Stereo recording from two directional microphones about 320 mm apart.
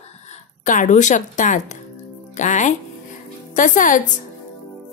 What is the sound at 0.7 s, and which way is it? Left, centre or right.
A woman's voice, left.